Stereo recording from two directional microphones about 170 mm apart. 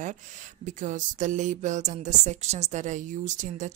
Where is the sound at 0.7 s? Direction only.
45° right (ahead or behind).